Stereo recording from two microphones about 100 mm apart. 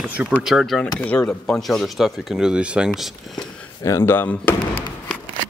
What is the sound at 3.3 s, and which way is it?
Speech, 30° left (ahead or behind).